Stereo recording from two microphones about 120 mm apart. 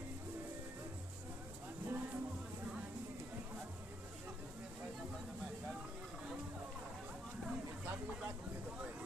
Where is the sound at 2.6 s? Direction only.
10° right (ahead or behind).